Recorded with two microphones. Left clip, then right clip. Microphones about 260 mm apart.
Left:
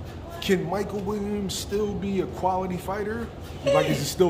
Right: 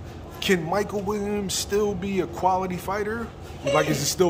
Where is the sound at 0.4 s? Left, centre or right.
Centre.